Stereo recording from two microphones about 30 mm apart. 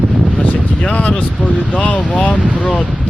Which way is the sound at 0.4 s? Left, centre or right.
Left.